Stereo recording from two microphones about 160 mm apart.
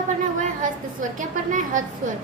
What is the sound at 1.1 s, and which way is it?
Speech, 55° right (ahead or behind).